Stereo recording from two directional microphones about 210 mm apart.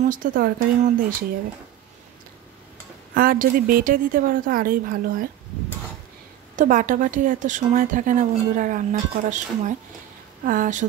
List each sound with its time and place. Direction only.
0.0 s a woman's voice: 40° right (ahead or behind)
3.2 s a woman's voice: 40° right (ahead or behind)
6.5 s a woman's voice: 40° right (ahead or behind)